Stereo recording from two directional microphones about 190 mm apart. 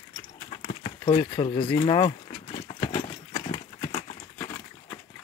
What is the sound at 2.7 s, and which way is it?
Horse, 20° left (ahead or behind).